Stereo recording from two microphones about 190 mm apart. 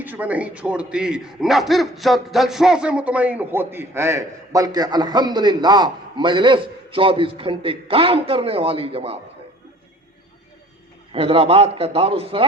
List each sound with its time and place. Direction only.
0.0 s speech: 10° right (ahead or behind); by 9.1 s 30° right (ahead or behind)
11.1 s a man's voice: 30° right (ahead or behind)